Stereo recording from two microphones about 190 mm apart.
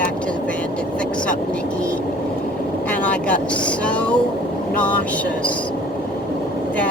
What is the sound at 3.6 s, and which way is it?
Speech, 5° left (ahead or behind).